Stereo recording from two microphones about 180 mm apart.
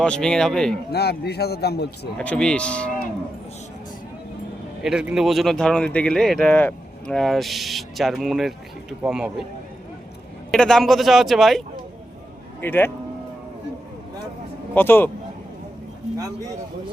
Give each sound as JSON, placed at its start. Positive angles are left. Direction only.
{"t": 0.0, "sound": "speech", "side_deg": 5}
{"t": 0.9, "sound": "a man's voice", "side_deg": 65}
{"t": 2.1, "sound": "speech", "side_deg": 5}
{"t": 4.8, "sound": "speech", "side_deg": -5}
{"t": 10.5, "sound": "speech", "side_deg": 5}
{"t": 12.6, "sound": "speech", "side_deg": 10}
{"t": 14.8, "sound": "speech", "side_deg": 10}